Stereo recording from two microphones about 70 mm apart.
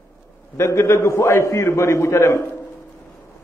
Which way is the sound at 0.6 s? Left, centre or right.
Left.